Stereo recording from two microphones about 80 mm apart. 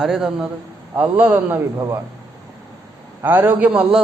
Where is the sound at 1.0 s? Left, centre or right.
Centre.